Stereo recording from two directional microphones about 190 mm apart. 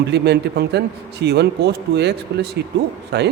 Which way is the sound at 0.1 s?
60° right (ahead or behind).